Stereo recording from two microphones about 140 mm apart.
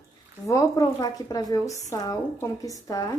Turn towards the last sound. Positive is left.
turn(degrees=25)  # may be behind; listen again after turning